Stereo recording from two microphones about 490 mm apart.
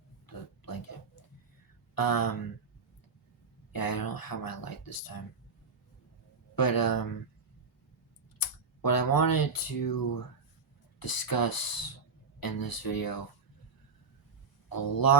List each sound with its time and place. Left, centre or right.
0.3 s oink: left
2.0 s speech: left
3.7 s speech: left
6.6 s speech: left
8.4 s speech: left
14.7 s speech: left